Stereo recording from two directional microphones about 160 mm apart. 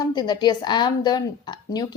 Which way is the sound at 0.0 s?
25° left (ahead or behind).